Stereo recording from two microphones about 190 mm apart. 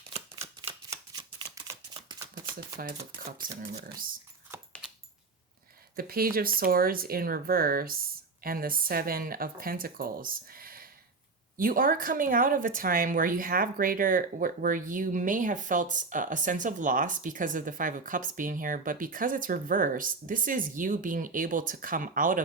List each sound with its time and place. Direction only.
0.9 s a sound: 20° right (ahead or behind)
3.2 s speech: 50° right (ahead or behind)
6.0 s speech: 50° right (ahead or behind)